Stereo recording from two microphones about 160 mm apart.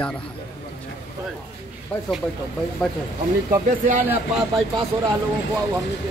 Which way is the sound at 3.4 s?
55° right (ahead or behind).